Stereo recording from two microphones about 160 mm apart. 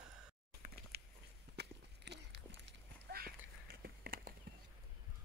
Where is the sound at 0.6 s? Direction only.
70° right (ahead or behind).